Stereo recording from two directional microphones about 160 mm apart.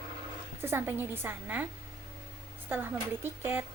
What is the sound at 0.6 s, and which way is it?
Speech, 15° right (ahead or behind).